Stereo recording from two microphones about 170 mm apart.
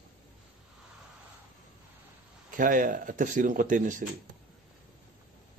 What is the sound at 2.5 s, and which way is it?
A man's voice, 55° right (ahead or behind).